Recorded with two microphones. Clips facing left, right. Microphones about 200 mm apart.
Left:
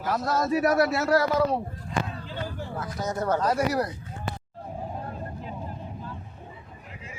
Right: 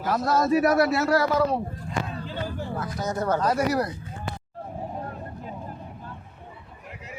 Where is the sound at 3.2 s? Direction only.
20° left (ahead or behind).